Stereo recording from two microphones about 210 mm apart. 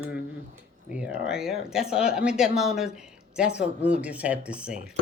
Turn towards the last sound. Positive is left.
turn(degrees=-5)  # may be behind; listen again after turning